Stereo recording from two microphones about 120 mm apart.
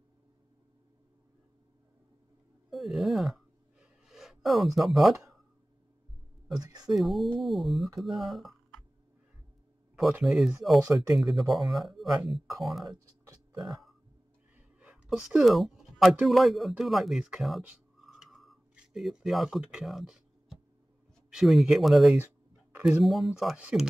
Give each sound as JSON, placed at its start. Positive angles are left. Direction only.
{"t": 2.7, "sound": "speech", "side_deg": 0}
{"t": 3.8, "sound": "a sound", "side_deg": -5}
{"t": 6.6, "sound": "speech", "side_deg": -35}
{"t": 6.9, "sound": "speech", "side_deg": 0}
{"t": 10.2, "sound": "speech", "side_deg": 0}
{"t": 12.9, "sound": "a sound", "side_deg": -30}
{"t": 14.8, "sound": "speech", "side_deg": -5}
{"t": 18.0, "sound": "a sound", "side_deg": 0}
{"t": 21.3, "sound": "speech", "side_deg": 0}